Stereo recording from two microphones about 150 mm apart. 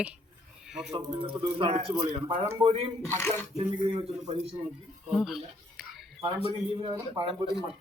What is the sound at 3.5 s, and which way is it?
Speech, 35° right (ahead or behind).